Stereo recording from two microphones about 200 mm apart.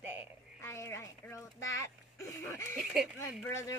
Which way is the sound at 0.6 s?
15° left (ahead or behind).